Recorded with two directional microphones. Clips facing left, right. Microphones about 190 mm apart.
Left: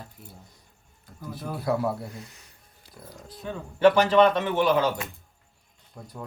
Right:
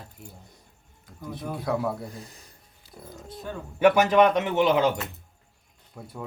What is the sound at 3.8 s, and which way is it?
A man's voice, 15° right (ahead or behind).